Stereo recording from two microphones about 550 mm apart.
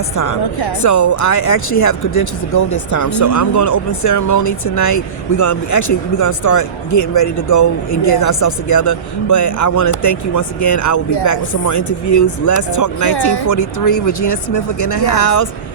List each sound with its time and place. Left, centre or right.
0.2 s speech: left
13.1 s speech: left